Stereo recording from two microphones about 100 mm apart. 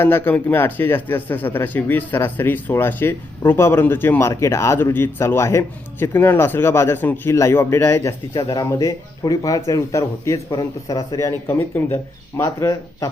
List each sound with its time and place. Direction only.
0.0 s speech: 20° left (ahead or behind)
4.3 s speech: 30° left (ahead or behind)
8.3 s speech: 50° left (ahead or behind)
8.6 s speech: 35° left (ahead or behind)